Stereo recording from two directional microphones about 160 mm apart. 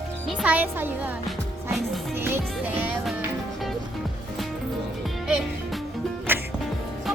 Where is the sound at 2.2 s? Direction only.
15° right (ahead or behind).